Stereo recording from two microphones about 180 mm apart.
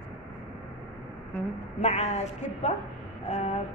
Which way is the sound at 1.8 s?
40° left (ahead or behind).